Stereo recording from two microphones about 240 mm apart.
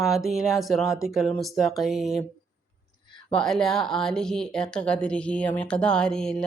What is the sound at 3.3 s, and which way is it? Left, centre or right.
Speech, centre.